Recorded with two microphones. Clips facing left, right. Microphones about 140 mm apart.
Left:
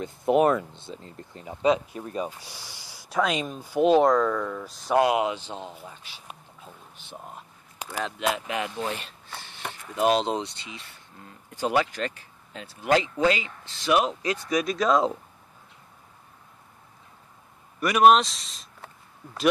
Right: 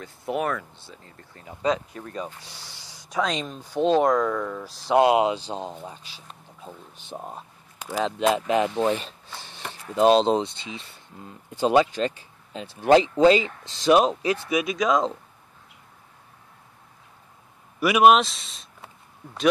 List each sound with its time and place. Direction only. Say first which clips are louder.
0.0 s speech: left 7 dB; 20° left (ahead or behind)
4.0 s speech: even; centre (ahead or behind)
4.9 s speech: right 3 dB; 25° right (ahead or behind)
7.2 s speech: right 5 dB; 35° right (ahead or behind)
9.9 s speech: right 5 dB; 25° right (ahead or behind)
14.5 s speech: left 1 dB; 5° right (ahead or behind)
17.7 s speech: right 1 dB; 5° right (ahead or behind)